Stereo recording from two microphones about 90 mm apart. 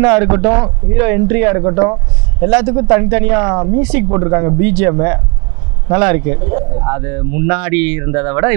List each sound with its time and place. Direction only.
0.1 s speech: 25° right (ahead or behind)